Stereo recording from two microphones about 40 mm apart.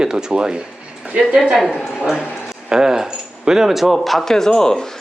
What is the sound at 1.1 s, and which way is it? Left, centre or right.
Speech, right.